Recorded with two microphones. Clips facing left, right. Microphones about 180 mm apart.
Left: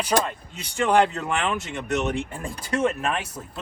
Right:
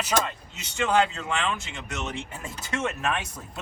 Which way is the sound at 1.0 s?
60° left (ahead or behind).